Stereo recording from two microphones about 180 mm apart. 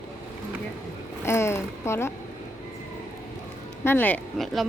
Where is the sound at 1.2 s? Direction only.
15° left (ahead or behind).